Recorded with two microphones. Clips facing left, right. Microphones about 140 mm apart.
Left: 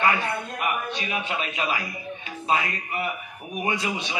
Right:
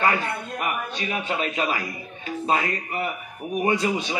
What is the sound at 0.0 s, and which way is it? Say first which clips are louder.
A man's voice: even; 40° right (ahead or behind).